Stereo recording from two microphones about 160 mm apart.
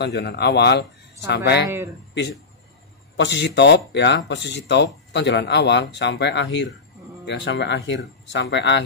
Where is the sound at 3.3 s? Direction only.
90° left.